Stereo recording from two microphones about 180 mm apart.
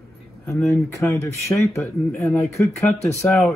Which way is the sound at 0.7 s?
15° left (ahead or behind).